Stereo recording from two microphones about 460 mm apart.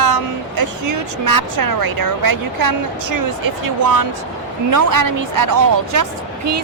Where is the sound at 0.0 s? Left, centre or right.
Right.